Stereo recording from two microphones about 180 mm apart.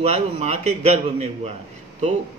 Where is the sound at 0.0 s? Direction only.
35° right (ahead or behind).